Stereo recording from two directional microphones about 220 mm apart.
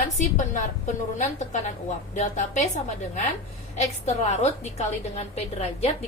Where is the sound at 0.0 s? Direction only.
35° left (ahead or behind).